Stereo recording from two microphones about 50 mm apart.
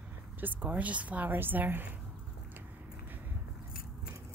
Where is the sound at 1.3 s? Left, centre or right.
Right.